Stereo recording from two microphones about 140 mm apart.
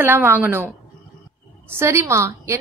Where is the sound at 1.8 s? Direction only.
20° right (ahead or behind).